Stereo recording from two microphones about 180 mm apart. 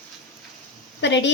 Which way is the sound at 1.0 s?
80° left.